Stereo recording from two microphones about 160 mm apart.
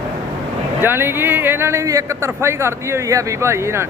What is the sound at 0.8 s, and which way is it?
A man's voice, 15° right (ahead or behind).